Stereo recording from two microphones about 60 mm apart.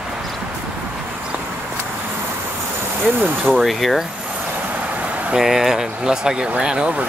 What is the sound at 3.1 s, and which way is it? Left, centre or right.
Speech, right.